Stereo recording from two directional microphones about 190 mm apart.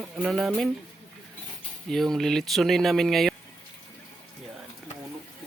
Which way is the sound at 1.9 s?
Centre (ahead or behind).